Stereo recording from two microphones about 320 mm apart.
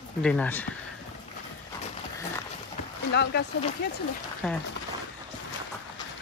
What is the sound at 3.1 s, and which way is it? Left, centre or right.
Speech, left.